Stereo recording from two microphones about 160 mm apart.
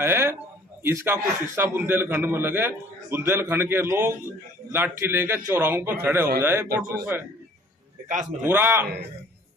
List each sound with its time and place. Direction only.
0.0 s a man's voice: 15° right (ahead or behind)
8.0 s a man's voice: 55° right (ahead or behind)
8.4 s a man's voice: 15° right (ahead or behind)